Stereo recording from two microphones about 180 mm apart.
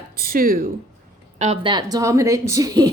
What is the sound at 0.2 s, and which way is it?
Speech, 55° right (ahead or behind).